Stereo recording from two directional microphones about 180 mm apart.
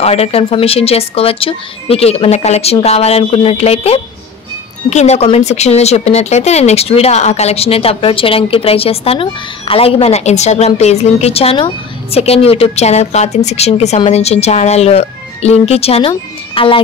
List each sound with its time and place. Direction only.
0.0 s speech: 35° left (ahead or behind)